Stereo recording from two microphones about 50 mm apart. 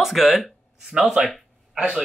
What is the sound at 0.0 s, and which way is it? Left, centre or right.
Speech, centre.